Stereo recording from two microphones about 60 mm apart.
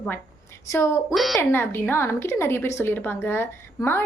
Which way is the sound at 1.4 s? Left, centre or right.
Left.